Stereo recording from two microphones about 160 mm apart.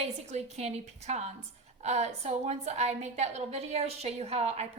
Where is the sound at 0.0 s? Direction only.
45° right (ahead or behind).